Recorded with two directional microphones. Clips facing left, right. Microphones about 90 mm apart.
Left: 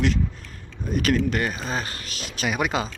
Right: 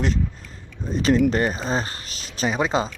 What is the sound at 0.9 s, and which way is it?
Speech, 30° right (ahead or behind).